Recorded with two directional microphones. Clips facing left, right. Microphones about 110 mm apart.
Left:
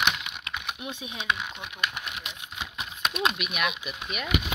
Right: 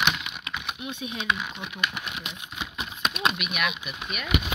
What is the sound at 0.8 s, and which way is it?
Speech, 35° left (ahead or behind).